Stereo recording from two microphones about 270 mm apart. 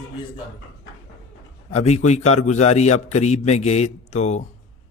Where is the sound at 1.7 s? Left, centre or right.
Left.